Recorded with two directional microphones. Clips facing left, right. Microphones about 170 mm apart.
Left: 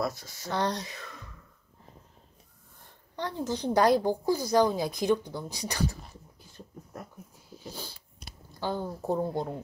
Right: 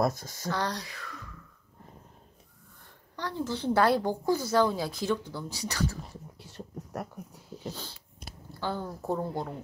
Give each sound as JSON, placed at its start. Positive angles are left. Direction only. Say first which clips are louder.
{"t": 0.0, "sound": "speech", "louder": "right 4 dB", "side_deg": -45}
{"t": 0.5, "sound": "speech", "louder": "left 2 dB", "side_deg": 20}
{"t": 3.2, "sound": "speech", "louder": "left 1 dB", "side_deg": 20}
{"t": 6.4, "sound": "a sound", "louder": "right 5 dB", "side_deg": -75}
{"t": 7.7, "sound": "a sound", "louder": "left 1 dB", "side_deg": 10}
{"t": 8.5, "sound": "speech", "louder": "left 2 dB", "side_deg": 15}